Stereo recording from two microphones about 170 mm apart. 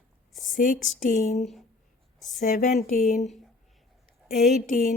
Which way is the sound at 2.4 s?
55° left (ahead or behind).